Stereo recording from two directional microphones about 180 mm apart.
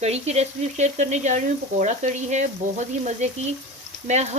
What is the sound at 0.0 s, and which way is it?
Speech, 35° right (ahead or behind).